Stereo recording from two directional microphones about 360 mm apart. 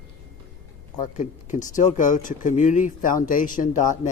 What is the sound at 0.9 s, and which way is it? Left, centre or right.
Speech, left.